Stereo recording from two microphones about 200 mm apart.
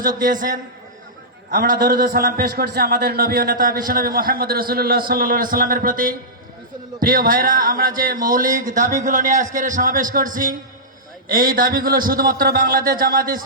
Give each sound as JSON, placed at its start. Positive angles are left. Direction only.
{"t": 0.2, "sound": "a man's voice", "side_deg": -45}